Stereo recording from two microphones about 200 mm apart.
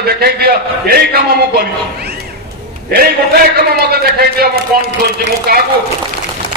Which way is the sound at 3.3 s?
50° right (ahead or behind).